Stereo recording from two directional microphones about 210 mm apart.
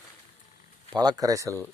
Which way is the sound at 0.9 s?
20° right (ahead or behind).